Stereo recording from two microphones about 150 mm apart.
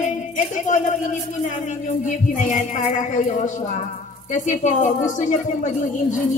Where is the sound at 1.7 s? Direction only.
55° left (ahead or behind).